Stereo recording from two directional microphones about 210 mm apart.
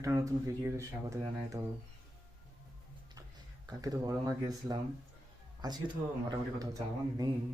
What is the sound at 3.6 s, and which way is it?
Speech, 15° right (ahead or behind).